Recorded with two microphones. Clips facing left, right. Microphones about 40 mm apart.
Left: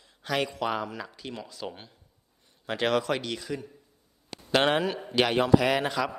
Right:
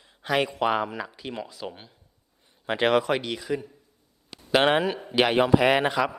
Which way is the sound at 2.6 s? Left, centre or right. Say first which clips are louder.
Right 4 dB; right.